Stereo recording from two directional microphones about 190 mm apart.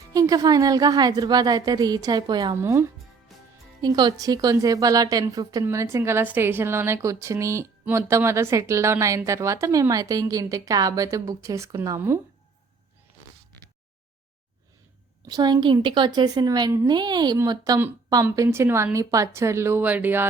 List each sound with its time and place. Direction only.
0.1 s a woman's voice: 20° right (ahead or behind)
15.3 s a woman's voice: 20° right (ahead or behind)